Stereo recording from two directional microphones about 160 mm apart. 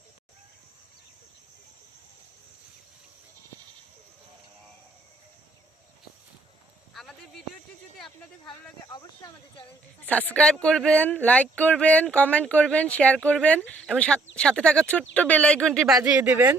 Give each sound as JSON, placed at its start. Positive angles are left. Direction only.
{"t": 6.9, "sound": "a sound", "side_deg": 0}
{"t": 8.9, "sound": "speech", "side_deg": 25}
{"t": 10.1, "sound": "speech", "side_deg": 10}
{"t": 16.0, "sound": "speech", "side_deg": -10}